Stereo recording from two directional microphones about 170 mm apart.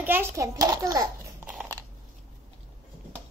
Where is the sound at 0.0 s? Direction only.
10° right (ahead or behind).